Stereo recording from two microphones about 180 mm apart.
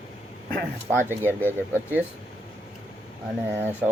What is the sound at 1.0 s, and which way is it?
Speech, 10° right (ahead or behind).